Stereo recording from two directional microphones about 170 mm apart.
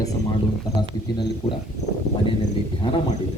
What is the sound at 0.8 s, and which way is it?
Speech, 25° left (ahead or behind).